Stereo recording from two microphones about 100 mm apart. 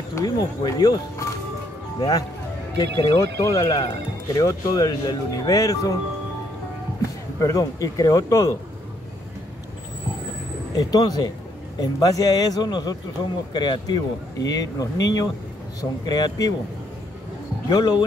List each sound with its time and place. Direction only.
0.1 s speech: 40° left (ahead or behind)
7.3 s speech: 30° left (ahead or behind)
10.8 s speech: 40° left (ahead or behind)
17.6 s speech: 40° left (ahead or behind)